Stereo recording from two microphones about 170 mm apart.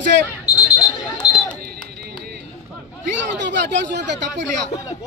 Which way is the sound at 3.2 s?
90° right.